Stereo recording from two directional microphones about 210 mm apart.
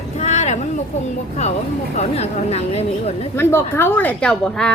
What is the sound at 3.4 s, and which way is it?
A woman's voice, 10° left (ahead or behind).